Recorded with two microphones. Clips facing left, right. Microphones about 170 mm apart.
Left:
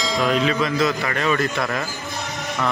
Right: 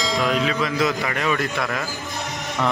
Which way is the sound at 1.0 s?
10° right (ahead or behind).